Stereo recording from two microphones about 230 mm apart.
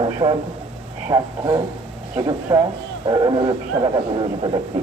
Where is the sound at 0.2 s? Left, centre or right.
Right.